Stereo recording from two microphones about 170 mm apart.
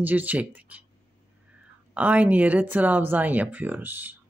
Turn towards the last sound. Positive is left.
turn(degrees=-10)  # may be behind; listen again after turning